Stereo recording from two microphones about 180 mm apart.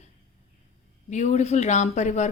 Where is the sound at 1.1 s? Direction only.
40° left (ahead or behind).